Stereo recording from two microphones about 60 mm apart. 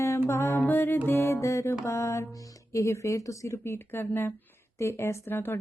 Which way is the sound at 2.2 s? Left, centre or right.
Left.